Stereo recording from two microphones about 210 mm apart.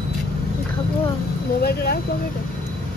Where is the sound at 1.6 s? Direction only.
45° left (ahead or behind).